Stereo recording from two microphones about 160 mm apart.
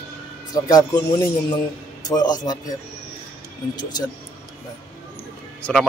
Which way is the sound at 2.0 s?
25° left (ahead or behind).